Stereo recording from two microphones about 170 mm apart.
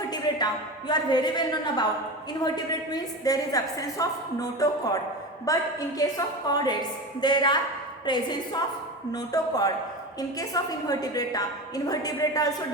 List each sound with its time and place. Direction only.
0.1 s a woman's voice: 25° left (ahead or behind)
2.9 s a woman's voice: 20° left (ahead or behind)